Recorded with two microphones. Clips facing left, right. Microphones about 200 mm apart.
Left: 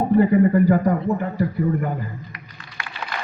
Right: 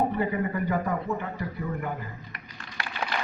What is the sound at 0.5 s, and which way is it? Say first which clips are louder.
A man's voice: left 10 dB; 45° left (ahead or behind).